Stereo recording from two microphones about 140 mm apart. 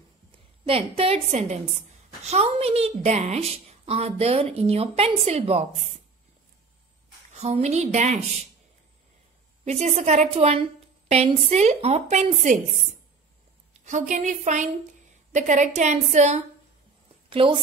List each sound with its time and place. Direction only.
0.7 s a woman's voice: 40° right (ahead or behind)
7.3 s a woman's voice: 50° right (ahead or behind)
9.7 s a woman's voice: 50° right (ahead or behind)
13.8 s a woman's voice: 60° right (ahead or behind)
17.3 s a woman's voice: 40° right (ahead or behind)